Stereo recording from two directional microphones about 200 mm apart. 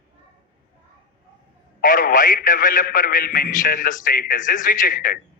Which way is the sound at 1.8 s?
45° left (ahead or behind).